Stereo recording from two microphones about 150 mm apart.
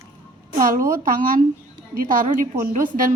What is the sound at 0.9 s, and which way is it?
Speech, 65° right (ahead or behind).